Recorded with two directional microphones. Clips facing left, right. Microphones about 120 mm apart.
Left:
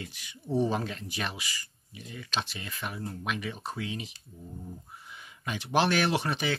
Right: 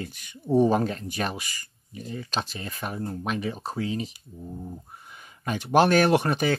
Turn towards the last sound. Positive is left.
turn(degrees=-45)  # may be behind; listen again after turning